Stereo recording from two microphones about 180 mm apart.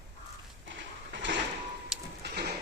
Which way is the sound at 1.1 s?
90° right.